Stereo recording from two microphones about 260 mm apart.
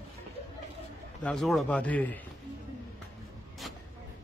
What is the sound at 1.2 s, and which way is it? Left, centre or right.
Speech, centre.